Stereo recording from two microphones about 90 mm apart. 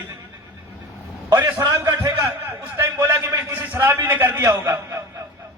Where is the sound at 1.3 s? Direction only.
30° right (ahead or behind).